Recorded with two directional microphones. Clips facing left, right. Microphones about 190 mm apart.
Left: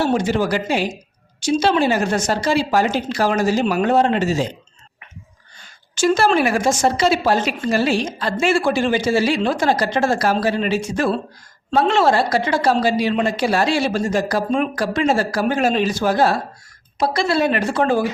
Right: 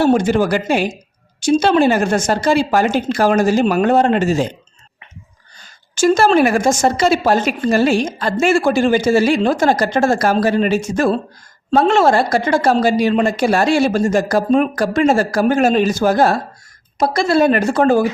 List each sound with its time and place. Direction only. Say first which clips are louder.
0.0 s a woman's voice: right 5 dB; 50° right (ahead or behind)
5.5 s a woman's voice: right 4 dB; 45° right (ahead or behind)